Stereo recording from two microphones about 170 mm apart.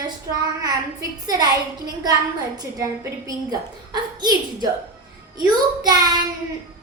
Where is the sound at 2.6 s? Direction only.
20° right (ahead or behind).